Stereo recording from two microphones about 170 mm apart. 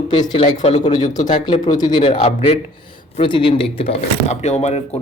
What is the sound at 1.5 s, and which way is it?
Speech, 25° left (ahead or behind).